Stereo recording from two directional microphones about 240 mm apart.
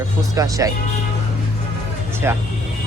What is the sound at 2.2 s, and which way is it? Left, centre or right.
Speech, centre.